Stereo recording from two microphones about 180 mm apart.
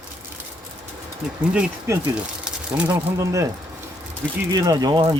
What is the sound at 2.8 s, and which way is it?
Speech, 15° right (ahead or behind).